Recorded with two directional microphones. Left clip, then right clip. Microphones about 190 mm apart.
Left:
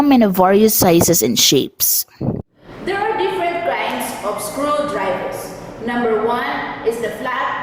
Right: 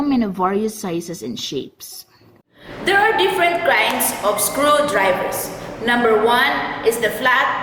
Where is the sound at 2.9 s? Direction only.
5° left (ahead or behind).